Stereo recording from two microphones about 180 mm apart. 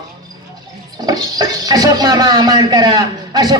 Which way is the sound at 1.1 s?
20° right (ahead or behind).